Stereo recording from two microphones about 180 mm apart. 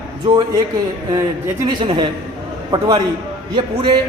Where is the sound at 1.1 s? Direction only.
20° right (ahead or behind).